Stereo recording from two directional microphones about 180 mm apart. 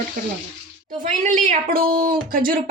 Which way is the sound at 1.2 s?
45° right (ahead or behind).